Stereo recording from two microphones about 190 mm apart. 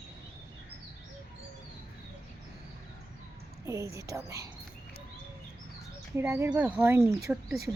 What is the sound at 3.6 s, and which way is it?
Speech, 15° right (ahead or behind).